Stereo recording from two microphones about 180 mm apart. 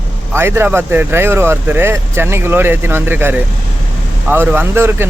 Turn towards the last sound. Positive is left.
turn(degrees=-10)  # may be behind; listen again after turning